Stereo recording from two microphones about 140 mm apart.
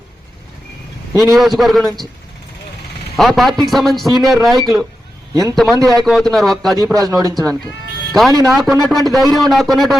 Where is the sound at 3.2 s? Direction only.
Centre (ahead or behind).